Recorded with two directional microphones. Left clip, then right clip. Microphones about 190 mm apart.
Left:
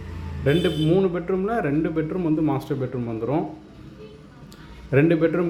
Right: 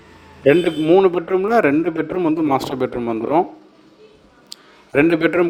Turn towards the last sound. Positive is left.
turn(degrees=-40)  # may be behind; listen again after turning